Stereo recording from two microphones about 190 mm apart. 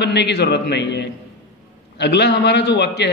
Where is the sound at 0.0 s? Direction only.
60° left (ahead or behind).